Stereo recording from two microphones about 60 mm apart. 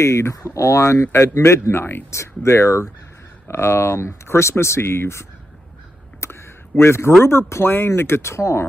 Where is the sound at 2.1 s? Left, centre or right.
Left.